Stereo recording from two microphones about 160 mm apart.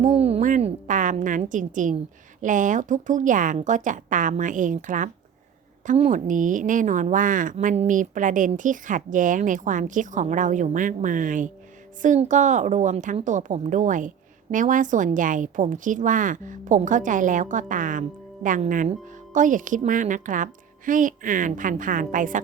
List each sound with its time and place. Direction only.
0.1 s a woman's voice: 40° right (ahead or behind)